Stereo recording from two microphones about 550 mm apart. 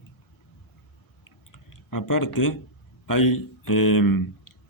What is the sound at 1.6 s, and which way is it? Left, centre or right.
Speech, left.